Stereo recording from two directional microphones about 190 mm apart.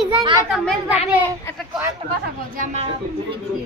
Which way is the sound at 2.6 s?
35° right (ahead or behind).